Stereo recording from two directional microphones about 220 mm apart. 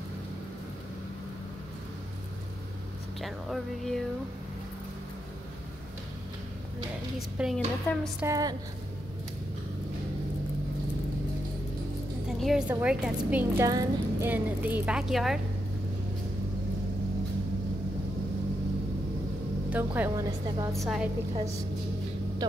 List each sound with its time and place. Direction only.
3.2 s a woman's voice: centre (ahead or behind)
7.2 s a woman's voice: centre (ahead or behind)
8.3 s a woman's voice: 15° right (ahead or behind)
12.3 s a woman's voice: centre (ahead or behind)
19.7 s a woman's voice: 10° right (ahead or behind)
20.7 s a woman's voice: centre (ahead or behind)
22.4 s a woman's voice: 15° right (ahead or behind)